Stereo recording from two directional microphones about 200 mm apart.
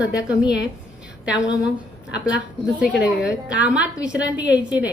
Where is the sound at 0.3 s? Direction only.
5° right (ahead or behind).